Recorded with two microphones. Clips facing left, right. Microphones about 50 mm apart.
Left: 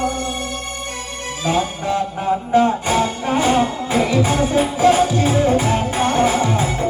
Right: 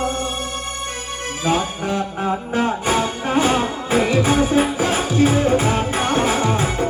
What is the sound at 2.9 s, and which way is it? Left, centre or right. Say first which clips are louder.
Music: left 1 dB; centre.